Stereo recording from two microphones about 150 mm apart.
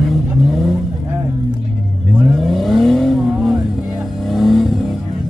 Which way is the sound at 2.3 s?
Centre (ahead or behind).